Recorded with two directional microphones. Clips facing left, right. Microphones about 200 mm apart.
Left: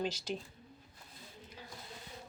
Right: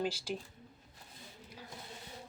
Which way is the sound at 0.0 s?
10° right (ahead or behind).